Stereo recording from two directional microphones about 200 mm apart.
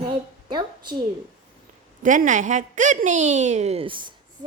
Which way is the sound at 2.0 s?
40° right (ahead or behind).